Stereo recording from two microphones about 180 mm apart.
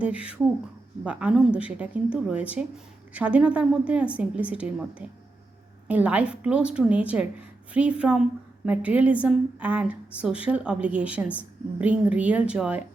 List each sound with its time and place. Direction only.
0.0 s speech: 5° right (ahead or behind)